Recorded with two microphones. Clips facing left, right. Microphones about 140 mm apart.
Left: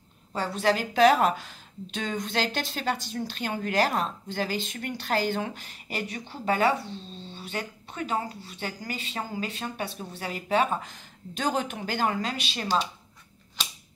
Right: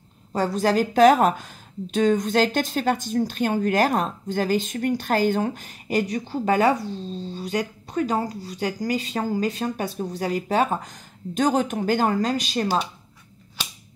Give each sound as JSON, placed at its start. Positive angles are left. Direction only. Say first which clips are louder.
{"t": 0.3, "sound": "a woman's voice", "louder": "right 4 dB", "side_deg": -40}